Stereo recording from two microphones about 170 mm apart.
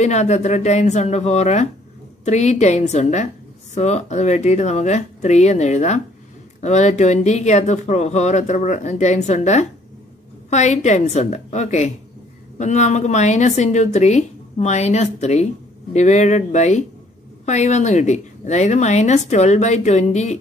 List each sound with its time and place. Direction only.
0.0 s speech: 40° left (ahead or behind)